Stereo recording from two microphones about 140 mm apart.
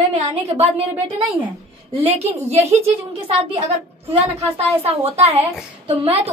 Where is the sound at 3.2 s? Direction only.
40° right (ahead or behind).